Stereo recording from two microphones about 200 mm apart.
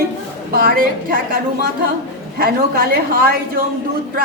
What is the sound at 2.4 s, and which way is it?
Speech, 50° right (ahead or behind).